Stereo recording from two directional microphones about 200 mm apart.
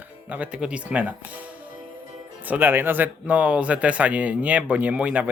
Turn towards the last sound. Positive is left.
turn(degrees=-5)  # may be behind; listen again after turning